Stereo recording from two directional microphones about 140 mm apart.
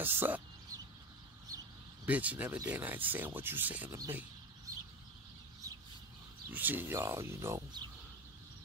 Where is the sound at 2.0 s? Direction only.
10° right (ahead or behind).